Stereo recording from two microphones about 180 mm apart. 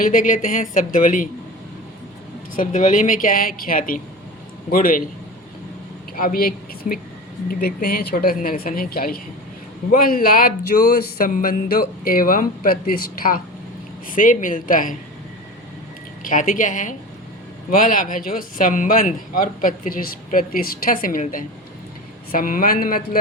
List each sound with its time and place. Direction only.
0.0 s speech: 50° left (ahead or behind)
2.6 s speech: 45° left (ahead or behind)
6.1 s speech: 55° left (ahead or behind)
16.2 s speech: 50° left (ahead or behind)